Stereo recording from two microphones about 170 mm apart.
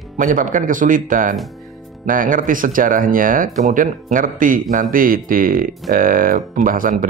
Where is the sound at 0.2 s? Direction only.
50° right (ahead or behind).